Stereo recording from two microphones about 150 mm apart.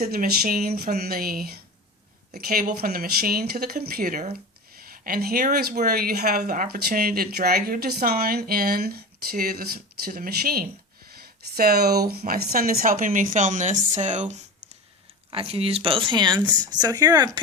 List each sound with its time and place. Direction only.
0.0 s speech: 90° right
10.1 s speech: 80° right; by 14.4 s 50° right (ahead or behind)
15.3 s speech: 40° right (ahead or behind)